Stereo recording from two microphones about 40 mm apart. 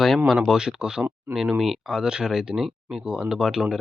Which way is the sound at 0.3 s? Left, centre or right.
Centre.